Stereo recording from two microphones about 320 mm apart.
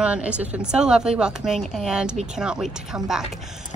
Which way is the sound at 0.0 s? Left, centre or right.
Centre.